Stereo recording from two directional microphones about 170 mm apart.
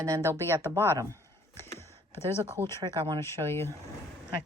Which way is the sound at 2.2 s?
30° right (ahead or behind).